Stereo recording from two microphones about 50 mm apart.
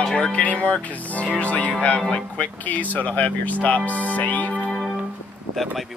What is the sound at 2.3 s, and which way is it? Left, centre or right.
Speech, left.